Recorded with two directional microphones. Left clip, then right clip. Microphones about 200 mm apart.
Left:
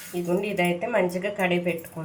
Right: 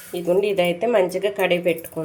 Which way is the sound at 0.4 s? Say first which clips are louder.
Right 6 dB; 50° right (ahead or behind).